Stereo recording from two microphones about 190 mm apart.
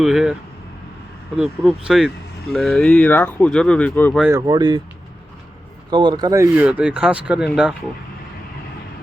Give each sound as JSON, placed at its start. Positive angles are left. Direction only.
{"t": 0.0, "sound": "speech", "side_deg": 0}
{"t": 1.4, "sound": "speech", "side_deg": -5}
{"t": 4.2, "sound": "speech", "side_deg": -15}
{"t": 5.9, "sound": "speech", "side_deg": -25}